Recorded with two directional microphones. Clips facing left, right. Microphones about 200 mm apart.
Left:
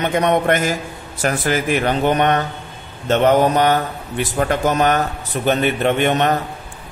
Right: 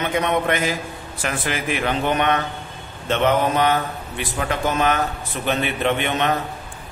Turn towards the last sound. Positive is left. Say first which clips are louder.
# left 5 dB
turn(degrees=45)  # may be behind; listen again after turning